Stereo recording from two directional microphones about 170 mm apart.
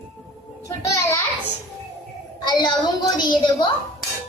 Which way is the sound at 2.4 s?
25° left (ahead or behind).